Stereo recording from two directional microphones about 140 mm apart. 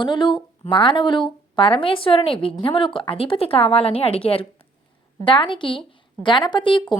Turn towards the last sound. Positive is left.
turn(degrees=35)  # may be behind; listen again after turning